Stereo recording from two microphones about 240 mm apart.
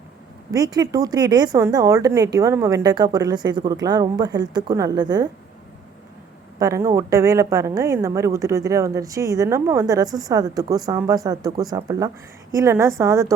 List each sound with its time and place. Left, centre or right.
0.5 s speech: centre
6.6 s speech: centre